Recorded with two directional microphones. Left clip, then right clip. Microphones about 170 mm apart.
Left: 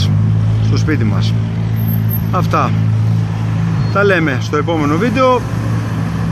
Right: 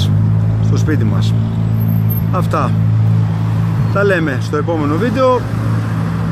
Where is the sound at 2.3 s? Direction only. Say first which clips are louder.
Left 2 dB; 10° left (ahead or behind).